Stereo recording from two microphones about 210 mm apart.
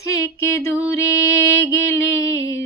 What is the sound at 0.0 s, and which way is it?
Music, 15° left (ahead or behind).